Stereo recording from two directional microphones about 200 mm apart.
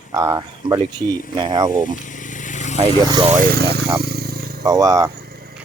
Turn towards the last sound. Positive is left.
turn(degrees=-15)  # may be behind; listen again after turning